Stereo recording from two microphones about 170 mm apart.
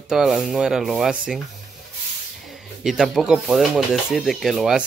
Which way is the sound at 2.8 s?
Centre (ahead or behind).